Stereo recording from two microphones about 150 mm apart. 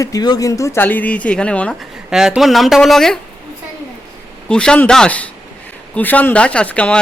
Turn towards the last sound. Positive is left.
turn(degrees=10)  # may be behind; listen again after turning